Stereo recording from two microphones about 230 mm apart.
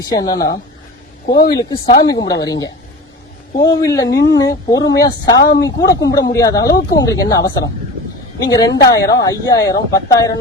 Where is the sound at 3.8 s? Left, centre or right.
Centre.